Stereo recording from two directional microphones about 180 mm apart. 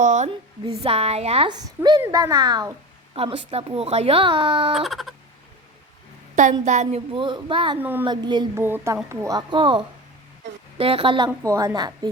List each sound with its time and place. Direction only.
0.0 s a sound: 45° right (ahead or behind)
0.6 s a woman's voice: 35° right (ahead or behind)
4.7 s bleat: centre (ahead or behind)
6.3 s a woman's voice: 45° right (ahead or behind); by 7.8 s 25° right (ahead or behind)
7.8 s a woman's voice: 10° right (ahead or behind)
8.0 s a woman's voice: 25° right (ahead or behind)
8.6 s a woman's voice: 15° right (ahead or behind)